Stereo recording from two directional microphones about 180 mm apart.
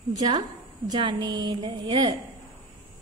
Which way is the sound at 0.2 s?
25° right (ahead or behind).